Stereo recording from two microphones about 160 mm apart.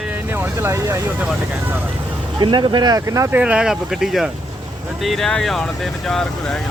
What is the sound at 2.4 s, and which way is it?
Speech, 30° right (ahead or behind).